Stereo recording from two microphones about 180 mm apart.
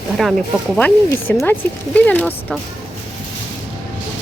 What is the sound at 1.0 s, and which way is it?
Speech, 10° left (ahead or behind).